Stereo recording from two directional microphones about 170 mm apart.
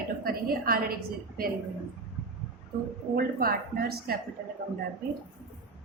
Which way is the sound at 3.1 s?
65° right (ahead or behind).